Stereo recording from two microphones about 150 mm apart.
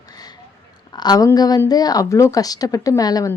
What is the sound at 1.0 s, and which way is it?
Speech, 25° left (ahead or behind).